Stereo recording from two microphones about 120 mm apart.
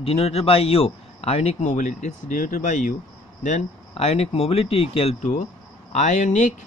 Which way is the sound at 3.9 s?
55° left (ahead or behind).